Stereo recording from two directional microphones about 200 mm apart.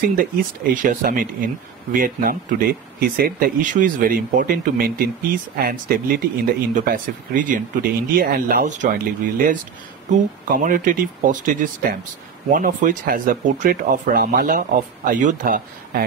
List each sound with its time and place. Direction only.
0.0 s speech: 45° right (ahead or behind)